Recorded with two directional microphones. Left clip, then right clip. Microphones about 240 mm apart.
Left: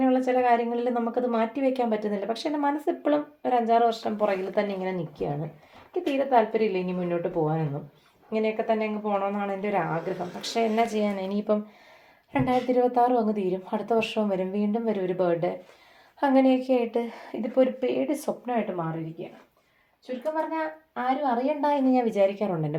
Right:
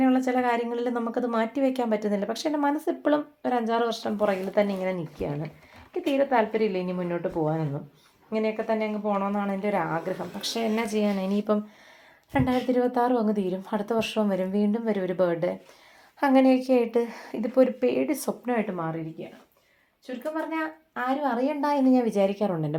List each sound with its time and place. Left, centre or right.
0.0 s a woman's voice: right
20.3 s a woman's voice: right